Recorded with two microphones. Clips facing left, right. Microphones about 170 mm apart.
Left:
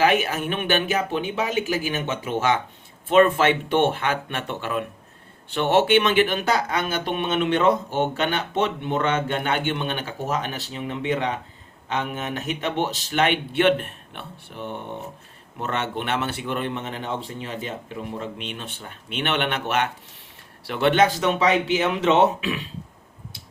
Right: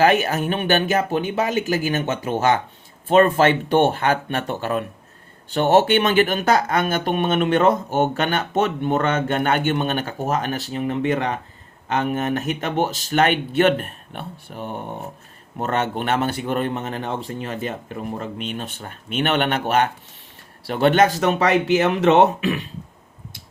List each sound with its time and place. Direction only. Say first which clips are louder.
0.0 s speech: right 3 dB; 40° right (ahead or behind)